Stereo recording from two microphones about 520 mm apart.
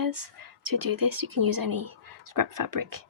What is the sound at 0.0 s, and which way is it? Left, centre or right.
Speech, right.